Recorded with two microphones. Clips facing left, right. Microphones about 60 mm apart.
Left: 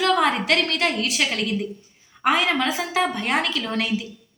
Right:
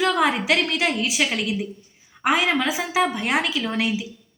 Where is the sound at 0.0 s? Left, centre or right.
Centre.